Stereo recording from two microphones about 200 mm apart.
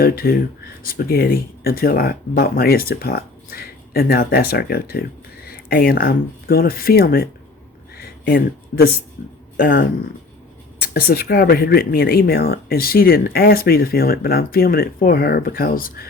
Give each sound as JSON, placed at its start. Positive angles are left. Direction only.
{"t": 0.0, "sound": "speech", "side_deg": 50}
{"t": 9.6, "sound": "speech", "side_deg": 45}